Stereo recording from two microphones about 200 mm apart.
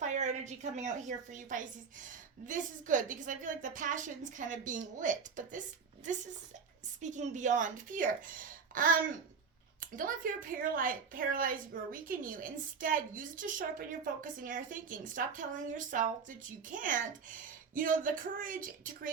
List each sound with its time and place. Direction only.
0.0 s a woman's voice: 35° right (ahead or behind)
10.6 s a woman's voice: 45° right (ahead or behind)